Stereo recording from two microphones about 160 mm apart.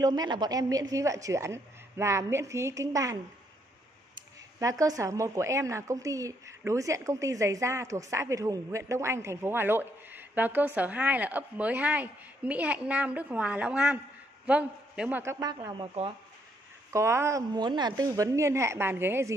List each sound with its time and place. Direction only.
0.0 s a woman's voice: 25° right (ahead or behind)
15.3 s a woman's voice: 25° right (ahead or behind)
16.9 s speech: 15° right (ahead or behind)